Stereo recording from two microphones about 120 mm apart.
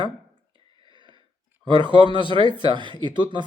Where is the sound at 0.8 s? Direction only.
40° right (ahead or behind).